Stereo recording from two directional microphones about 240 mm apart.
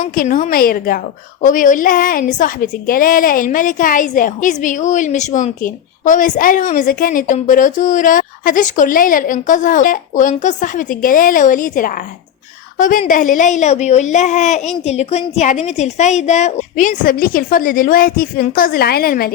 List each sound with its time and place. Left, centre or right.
0.0 s a woman's voice: left